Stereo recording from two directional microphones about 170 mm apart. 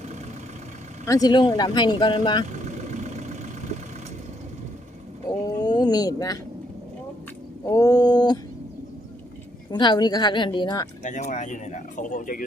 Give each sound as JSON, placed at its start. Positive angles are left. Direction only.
{"t": 1.0, "sound": "speech", "side_deg": 20}
{"t": 2.5, "sound": "vehicle", "side_deg": -45}
{"t": 5.5, "sound": "a sound", "side_deg": 25}
{"t": 7.6, "sound": "speech", "side_deg": 20}
{"t": 9.7, "sound": "speech", "side_deg": 25}
{"t": 11.0, "sound": "speech", "side_deg": 45}